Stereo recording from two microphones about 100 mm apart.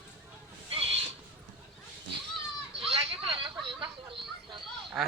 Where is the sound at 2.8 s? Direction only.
70° right (ahead or behind); by 4.6 s 55° right (ahead or behind).